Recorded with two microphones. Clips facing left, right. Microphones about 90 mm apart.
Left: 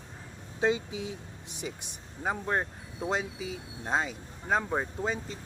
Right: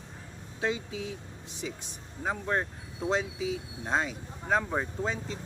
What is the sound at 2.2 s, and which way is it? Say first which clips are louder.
Speech: even; 15° left (ahead or behind).